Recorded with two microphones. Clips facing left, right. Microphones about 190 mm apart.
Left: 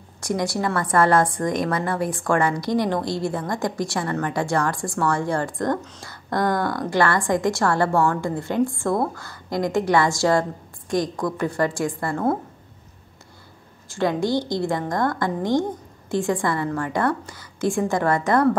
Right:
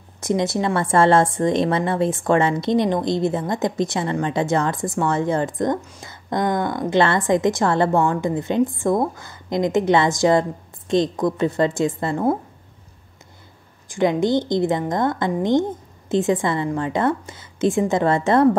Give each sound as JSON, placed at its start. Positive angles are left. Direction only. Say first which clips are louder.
{"t": 0.2, "sound": "a woman's voice", "louder": "right 3 dB", "side_deg": -20}
{"t": 13.8, "sound": "a woman's voice", "louder": "right 3 dB", "side_deg": -20}